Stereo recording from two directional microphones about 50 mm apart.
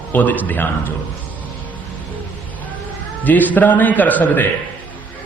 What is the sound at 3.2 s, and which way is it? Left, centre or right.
A man's voice, left.